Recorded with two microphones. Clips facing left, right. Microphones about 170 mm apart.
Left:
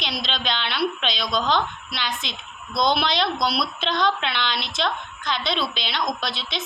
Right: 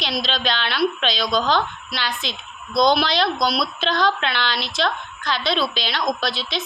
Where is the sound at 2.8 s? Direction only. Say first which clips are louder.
Right 4 dB; 25° left (ahead or behind).